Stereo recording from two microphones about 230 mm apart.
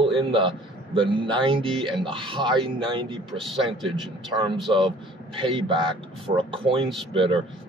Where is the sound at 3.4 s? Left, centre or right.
Centre.